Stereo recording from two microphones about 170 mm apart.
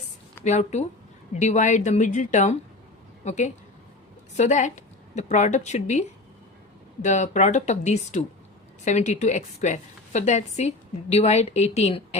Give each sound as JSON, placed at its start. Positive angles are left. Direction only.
{"t": 0.4, "sound": "a woman's voice", "side_deg": 40}